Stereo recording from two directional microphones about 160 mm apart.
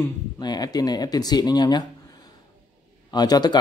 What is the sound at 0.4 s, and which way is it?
A man's voice, 25° left (ahead or behind).